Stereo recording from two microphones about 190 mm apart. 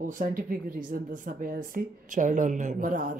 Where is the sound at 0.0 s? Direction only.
45° right (ahead or behind).